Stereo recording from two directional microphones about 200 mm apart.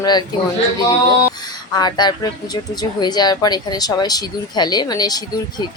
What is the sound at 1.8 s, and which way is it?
A woman's voice, 20° left (ahead or behind).